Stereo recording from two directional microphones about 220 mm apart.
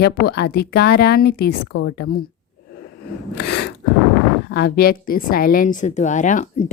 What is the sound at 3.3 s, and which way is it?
A woman's voice, 45° left (ahead or behind).